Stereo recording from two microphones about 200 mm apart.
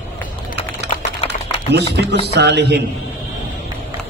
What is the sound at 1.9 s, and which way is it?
Speech, 60° right (ahead or behind).